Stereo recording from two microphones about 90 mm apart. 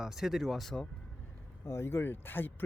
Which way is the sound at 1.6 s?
30° left (ahead or behind).